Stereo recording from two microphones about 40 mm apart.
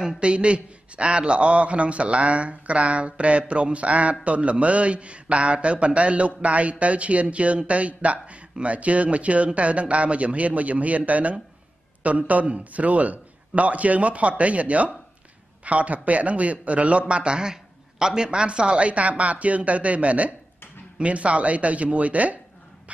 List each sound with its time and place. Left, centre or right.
0.2 s a man's voice: right
17.1 s a man's voice: right